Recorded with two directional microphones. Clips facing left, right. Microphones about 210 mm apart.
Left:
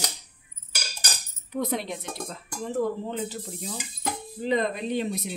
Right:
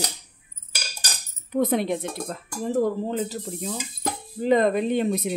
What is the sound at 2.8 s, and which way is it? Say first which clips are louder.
Speech: right 3 dB; 40° right (ahead or behind).